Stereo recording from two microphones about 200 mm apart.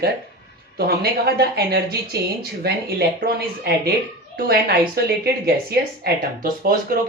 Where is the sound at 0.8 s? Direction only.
50° right (ahead or behind).